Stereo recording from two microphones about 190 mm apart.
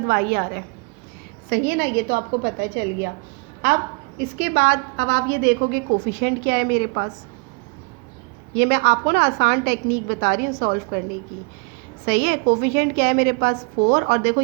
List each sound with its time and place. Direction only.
0.1 s a woman's voice: 50° right (ahead or behind)
4.2 s a woman's voice: 60° right (ahead or behind)
8.5 s a woman's voice: 60° right (ahead or behind)
12.0 s a woman's voice: 60° right (ahead or behind)